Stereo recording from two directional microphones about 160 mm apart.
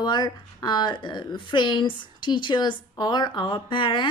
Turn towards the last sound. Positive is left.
turn(degrees=30)  # may be behind; listen again after turning